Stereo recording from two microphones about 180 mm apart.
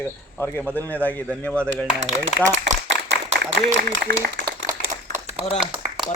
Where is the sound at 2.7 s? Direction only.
90° right.